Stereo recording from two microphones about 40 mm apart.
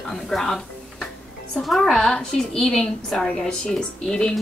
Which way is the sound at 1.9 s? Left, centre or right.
Centre.